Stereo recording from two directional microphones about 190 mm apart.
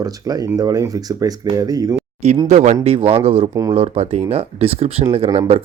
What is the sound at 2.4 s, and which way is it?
Speech, 40° right (ahead or behind).